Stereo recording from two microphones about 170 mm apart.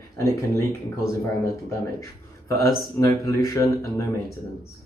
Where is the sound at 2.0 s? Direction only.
20° left (ahead or behind).